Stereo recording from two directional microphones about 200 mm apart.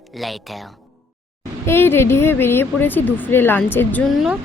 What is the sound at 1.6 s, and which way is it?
Speech, 10° left (ahead or behind).